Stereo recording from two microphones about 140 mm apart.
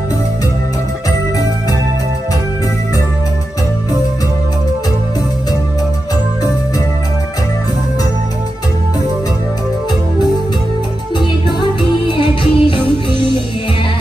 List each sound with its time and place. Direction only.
12.2 s music: 35° left (ahead or behind)